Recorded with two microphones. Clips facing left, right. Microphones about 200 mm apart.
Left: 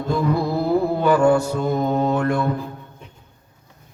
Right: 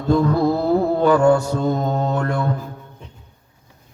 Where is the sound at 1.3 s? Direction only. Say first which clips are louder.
Right 1 dB; 5° left (ahead or behind).